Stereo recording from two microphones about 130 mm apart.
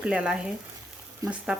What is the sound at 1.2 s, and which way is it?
Speech, 25° right (ahead or behind).